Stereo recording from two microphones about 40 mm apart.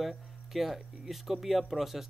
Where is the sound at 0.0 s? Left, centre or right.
Centre.